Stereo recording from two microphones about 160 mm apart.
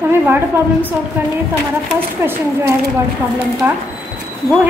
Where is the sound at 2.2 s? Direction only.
15° right (ahead or behind).